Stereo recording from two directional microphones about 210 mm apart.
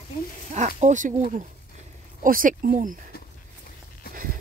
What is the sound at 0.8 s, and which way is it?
Speech, 35° right (ahead or behind).